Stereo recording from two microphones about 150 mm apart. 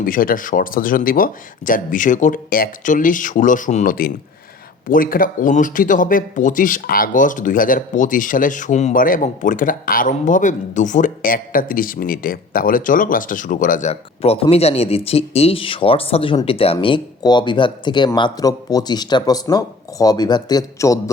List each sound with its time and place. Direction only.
0.0 s speech: 70° left (ahead or behind); by 3.9 s 55° left (ahead or behind)
4.9 s speech: 70° left (ahead or behind)
13.9 s speech: 40° left (ahead or behind); by 21.0 s 20° left (ahead or behind)